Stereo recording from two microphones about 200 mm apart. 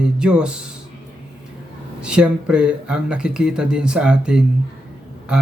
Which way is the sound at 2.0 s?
5° right (ahead or behind).